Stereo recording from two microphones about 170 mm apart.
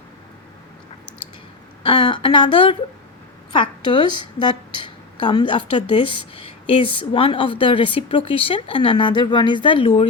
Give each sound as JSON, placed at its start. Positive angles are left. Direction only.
{"t": 1.8, "sound": "a woman's voice", "side_deg": 30}